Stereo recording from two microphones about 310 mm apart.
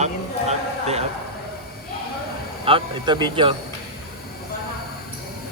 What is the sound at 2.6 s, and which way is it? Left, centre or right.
Speech, centre.